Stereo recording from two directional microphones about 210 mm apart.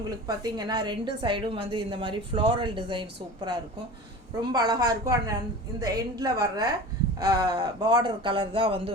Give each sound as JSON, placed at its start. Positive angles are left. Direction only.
{"t": 0.3, "sound": "a woman's voice", "side_deg": -20}